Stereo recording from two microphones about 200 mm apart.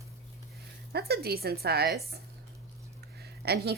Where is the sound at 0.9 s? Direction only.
55° right (ahead or behind).